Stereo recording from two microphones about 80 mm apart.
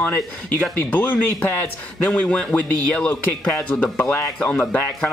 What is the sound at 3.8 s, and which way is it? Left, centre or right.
Speech, left.